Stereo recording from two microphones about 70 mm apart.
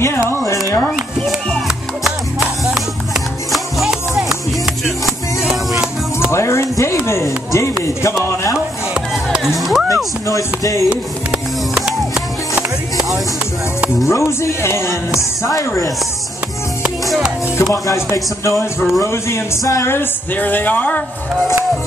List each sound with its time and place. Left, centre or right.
0.0 s speech: left
0.6 s speech: left
3.5 s music: centre
6.3 s speech: left
9.6 s music: centre
10.2 s speech: left
11.7 s music: centre
14.0 s speech: left
17.6 s speech: left
19.9 s speech: left